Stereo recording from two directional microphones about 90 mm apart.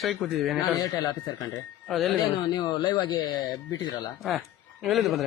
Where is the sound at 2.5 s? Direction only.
50° left (ahead or behind).